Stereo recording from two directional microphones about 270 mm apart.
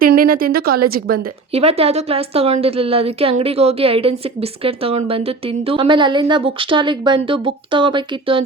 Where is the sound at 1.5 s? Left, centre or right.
Right.